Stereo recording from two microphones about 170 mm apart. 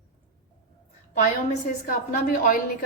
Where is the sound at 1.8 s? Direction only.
55° left (ahead or behind).